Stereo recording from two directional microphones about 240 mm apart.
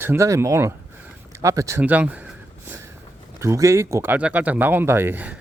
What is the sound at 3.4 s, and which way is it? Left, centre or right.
Speech, centre.